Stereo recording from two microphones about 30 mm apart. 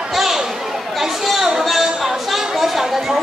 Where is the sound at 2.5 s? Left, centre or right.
Centre.